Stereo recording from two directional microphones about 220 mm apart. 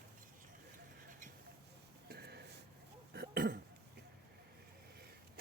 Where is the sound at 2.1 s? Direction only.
45° right (ahead or behind).